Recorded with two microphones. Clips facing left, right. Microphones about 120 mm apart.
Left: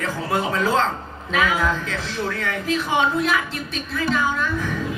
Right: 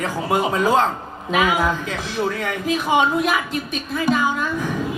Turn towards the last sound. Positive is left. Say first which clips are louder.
# right 1 dB
turn(degrees=-15)  # may be behind; listen again after turning